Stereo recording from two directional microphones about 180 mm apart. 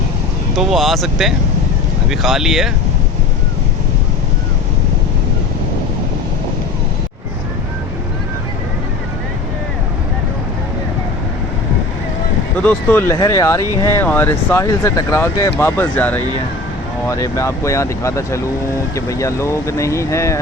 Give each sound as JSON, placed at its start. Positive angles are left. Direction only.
{"t": 0.5, "sound": "speech", "side_deg": 0}
{"t": 12.5, "sound": "speech", "side_deg": 10}